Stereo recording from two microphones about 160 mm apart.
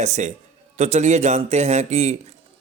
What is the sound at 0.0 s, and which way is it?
A man's voice, 45° right (ahead or behind).